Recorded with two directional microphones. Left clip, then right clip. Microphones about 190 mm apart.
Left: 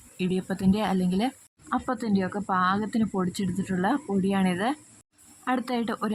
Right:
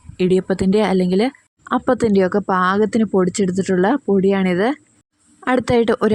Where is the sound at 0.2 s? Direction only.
25° right (ahead or behind).